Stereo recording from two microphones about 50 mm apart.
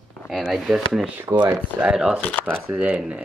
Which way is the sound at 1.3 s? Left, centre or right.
Right.